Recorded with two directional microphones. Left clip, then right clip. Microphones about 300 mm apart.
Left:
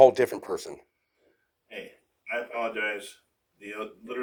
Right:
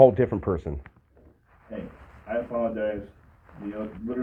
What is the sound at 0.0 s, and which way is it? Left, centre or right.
Speech, left.